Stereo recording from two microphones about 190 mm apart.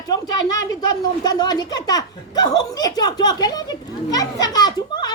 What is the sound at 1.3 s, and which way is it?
Speech, 20° left (ahead or behind).